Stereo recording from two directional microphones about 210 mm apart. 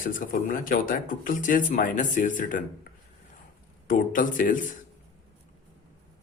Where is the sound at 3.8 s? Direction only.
40° left (ahead or behind).